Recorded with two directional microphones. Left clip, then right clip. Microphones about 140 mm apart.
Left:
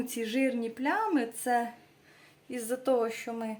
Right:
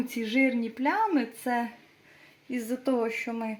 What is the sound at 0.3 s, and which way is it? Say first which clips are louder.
Speech: right 5 dB; 40° right (ahead or behind).